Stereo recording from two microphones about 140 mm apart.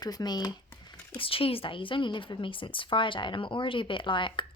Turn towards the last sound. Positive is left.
turn(degrees=35)  # may be behind; listen again after turning